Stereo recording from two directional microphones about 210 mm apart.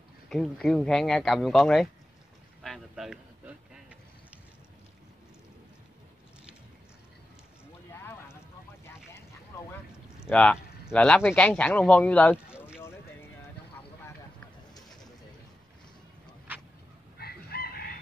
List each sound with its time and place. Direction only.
0.3 s speech: centre (ahead or behind)
2.6 s a sound: centre (ahead or behind)
7.9 s clip-clop: 10° left (ahead or behind)
10.2 s speech: 5° left (ahead or behind)
17.2 s chicken: 50° left (ahead or behind)